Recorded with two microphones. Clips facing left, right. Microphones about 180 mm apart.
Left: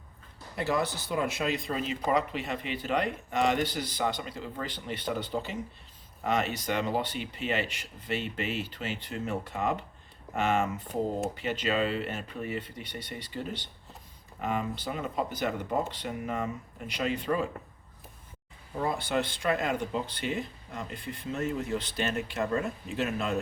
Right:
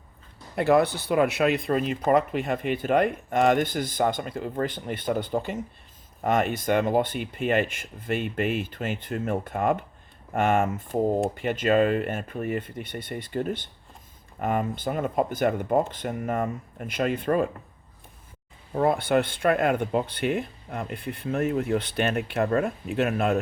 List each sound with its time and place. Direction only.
0.5 s speech: 60° right (ahead or behind)
18.8 s speech: 60° right (ahead or behind)